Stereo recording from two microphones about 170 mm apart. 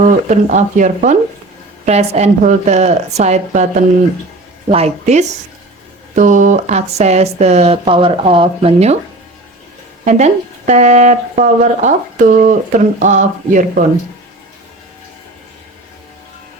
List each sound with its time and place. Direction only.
0.0 s speech: 45° right (ahead or behind)
4.7 s speech: 40° right (ahead or behind)
10.0 s speech: 45° right (ahead or behind)